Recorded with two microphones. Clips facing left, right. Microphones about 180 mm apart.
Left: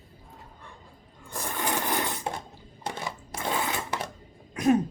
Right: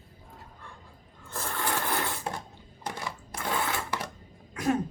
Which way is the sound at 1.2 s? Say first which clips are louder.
Left 1 dB; 15° left (ahead or behind).